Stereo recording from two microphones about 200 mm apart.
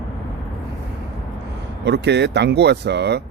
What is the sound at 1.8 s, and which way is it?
A man's voice, 60° right (ahead or behind).